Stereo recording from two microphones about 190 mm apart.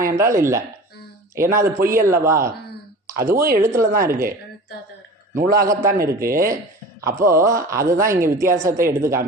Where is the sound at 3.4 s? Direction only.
50° right (ahead or behind).